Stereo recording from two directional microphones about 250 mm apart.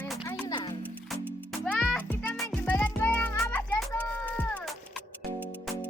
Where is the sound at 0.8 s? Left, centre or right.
Centre.